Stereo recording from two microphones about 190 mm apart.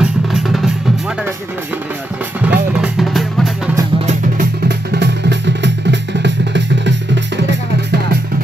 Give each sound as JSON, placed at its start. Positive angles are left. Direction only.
{"t": 0.0, "sound": "music", "side_deg": 0}
{"t": 2.4, "sound": "music", "side_deg": -5}
{"t": 4.6, "sound": "music", "side_deg": -65}